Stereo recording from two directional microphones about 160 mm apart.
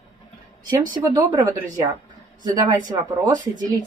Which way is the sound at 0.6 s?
25° right (ahead or behind).